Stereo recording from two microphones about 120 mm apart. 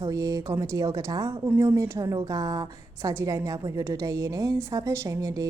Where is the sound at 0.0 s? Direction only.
30° right (ahead or behind).